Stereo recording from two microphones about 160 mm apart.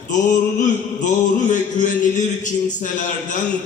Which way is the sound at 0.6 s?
50° left (ahead or behind).